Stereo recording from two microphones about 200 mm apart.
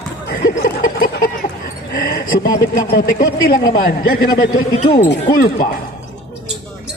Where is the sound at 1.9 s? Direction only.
50° left (ahead or behind).